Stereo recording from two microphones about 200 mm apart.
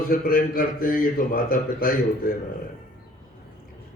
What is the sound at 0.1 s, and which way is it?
A man's voice, 45° left (ahead or behind).